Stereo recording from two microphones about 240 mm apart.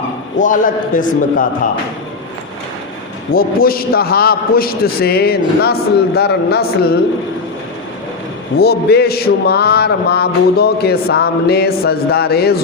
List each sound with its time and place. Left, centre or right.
0.3 s a man's voice: left
3.3 s a man's voice: left
8.5 s a man's voice: left